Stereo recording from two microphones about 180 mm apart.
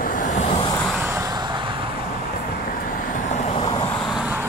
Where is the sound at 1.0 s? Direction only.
15° right (ahead or behind).